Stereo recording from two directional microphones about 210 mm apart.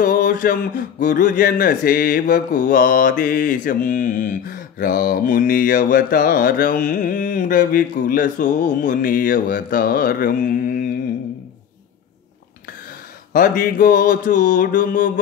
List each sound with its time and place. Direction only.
0.0 s a man's voice: 40° left (ahead or behind)
13.3 s a man's voice: 40° left (ahead or behind)